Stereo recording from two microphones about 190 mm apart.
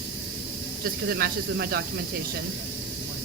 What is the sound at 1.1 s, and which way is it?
Speech, 55° right (ahead or behind).